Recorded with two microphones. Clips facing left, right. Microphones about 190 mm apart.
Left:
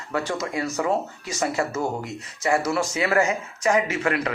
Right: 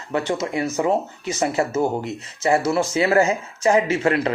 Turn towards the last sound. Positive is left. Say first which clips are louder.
# right 4 dB
turn(degrees=-25)  # may be behind; listen again after turning